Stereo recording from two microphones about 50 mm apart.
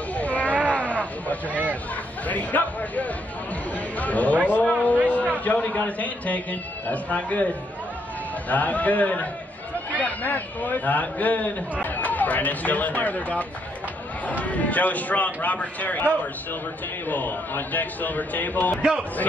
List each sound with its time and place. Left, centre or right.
0.1 s a sound: left
2.2 s a man's voice: left
8.5 s speech: left
17.1 s speech: left